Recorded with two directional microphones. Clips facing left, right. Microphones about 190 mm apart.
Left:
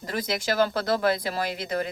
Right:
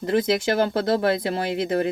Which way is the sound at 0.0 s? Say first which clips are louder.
Right 8 dB; 25° right (ahead or behind).